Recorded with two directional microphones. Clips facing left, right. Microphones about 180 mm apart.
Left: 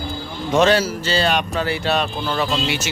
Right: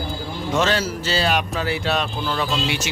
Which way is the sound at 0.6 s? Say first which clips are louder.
Left 8 dB; 10° left (ahead or behind).